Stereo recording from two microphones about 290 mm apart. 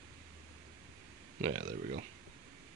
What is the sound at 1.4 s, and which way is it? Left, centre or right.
Speech, right.